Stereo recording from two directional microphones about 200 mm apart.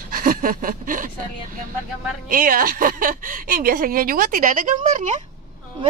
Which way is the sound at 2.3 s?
45° right (ahead or behind).